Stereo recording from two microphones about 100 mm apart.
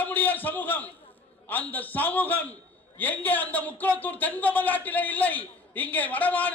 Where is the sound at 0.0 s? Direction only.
15° left (ahead or behind).